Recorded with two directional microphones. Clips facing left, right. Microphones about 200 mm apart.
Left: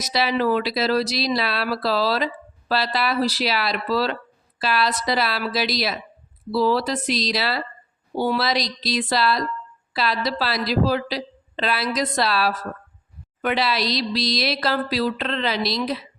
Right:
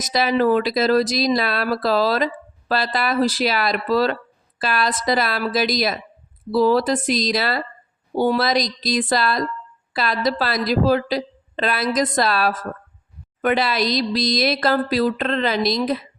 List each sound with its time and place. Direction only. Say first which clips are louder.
0.0 s speech: right 3 dB; 45° right (ahead or behind)